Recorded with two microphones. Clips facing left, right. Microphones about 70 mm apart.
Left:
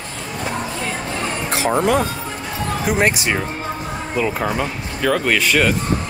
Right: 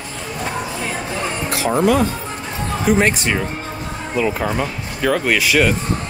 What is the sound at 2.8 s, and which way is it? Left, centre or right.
Speech, centre.